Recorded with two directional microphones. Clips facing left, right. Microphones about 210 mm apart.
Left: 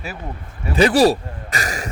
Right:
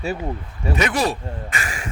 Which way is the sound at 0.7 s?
35° left (ahead or behind).